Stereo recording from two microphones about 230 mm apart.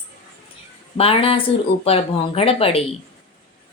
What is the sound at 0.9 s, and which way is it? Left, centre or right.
A woman's voice, left.